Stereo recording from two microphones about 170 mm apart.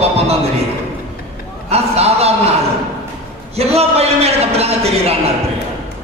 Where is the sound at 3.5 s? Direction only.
35° right (ahead or behind).